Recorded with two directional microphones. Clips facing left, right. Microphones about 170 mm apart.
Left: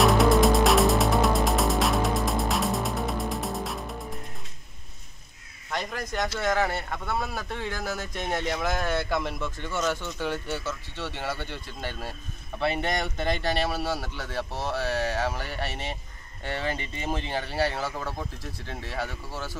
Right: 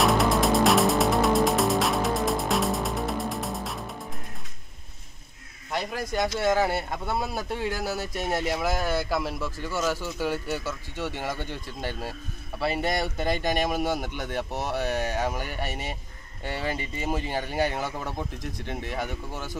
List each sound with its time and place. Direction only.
0.0 s music: centre (ahead or behind)
5.7 s speech: 10° right (ahead or behind)